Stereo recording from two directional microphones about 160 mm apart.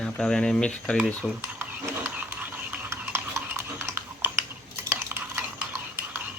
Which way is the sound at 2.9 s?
15° right (ahead or behind).